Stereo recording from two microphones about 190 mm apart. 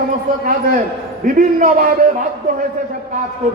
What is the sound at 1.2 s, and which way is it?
Speech, 50° right (ahead or behind).